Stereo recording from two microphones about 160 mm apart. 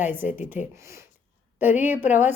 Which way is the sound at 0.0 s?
10° right (ahead or behind).